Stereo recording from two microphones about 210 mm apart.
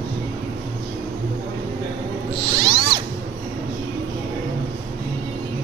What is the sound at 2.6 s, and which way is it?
Zipper, 25° right (ahead or behind).